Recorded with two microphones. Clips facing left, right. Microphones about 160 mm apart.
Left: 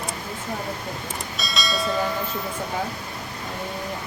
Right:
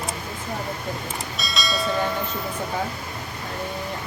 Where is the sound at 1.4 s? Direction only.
Centre (ahead or behind).